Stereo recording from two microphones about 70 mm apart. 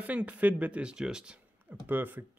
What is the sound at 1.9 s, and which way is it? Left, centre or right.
Speech, right.